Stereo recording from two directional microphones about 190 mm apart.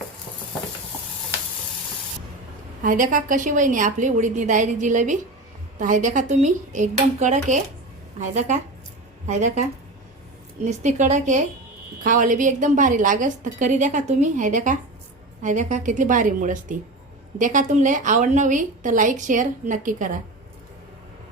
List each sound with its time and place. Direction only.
2.8 s a woman's voice: 45° right (ahead or behind)